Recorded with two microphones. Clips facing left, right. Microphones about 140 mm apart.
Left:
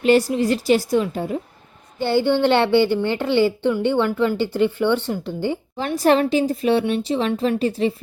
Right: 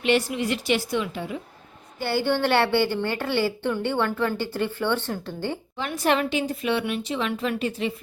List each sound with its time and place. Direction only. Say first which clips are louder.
0.0 s speech: left 6 dB; 40° left (ahead or behind)
2.0 s a woman's voice: left 6 dB; 20° left (ahead or behind)
5.7 s speech: left 6 dB; 35° left (ahead or behind)